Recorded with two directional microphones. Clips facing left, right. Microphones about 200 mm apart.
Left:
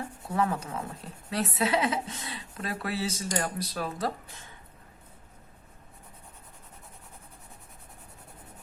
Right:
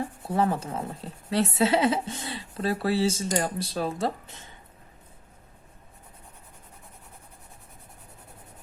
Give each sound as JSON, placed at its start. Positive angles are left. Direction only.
{"t": 0.0, "sound": "speech", "side_deg": -30}